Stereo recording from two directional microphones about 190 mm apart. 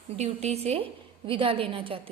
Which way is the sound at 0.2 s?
35° right (ahead or behind).